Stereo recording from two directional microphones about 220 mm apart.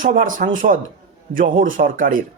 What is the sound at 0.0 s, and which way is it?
Speech, 35° right (ahead or behind).